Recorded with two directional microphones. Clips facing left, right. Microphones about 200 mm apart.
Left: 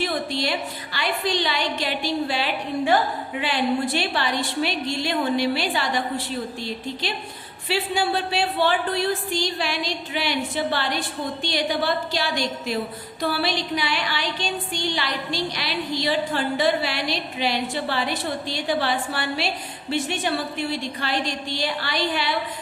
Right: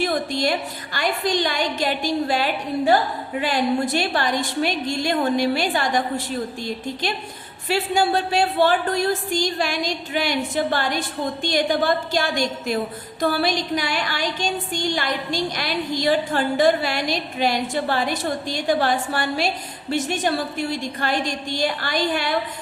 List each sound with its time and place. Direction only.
0.0 s a woman's voice: 45° right (ahead or behind)